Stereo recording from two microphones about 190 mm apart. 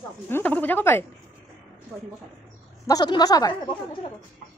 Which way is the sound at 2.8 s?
20° left (ahead or behind).